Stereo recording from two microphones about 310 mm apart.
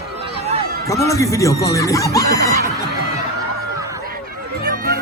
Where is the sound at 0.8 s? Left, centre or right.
Centre.